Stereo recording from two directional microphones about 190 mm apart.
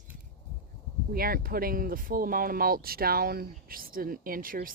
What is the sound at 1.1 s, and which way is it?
Speech, 50° right (ahead or behind).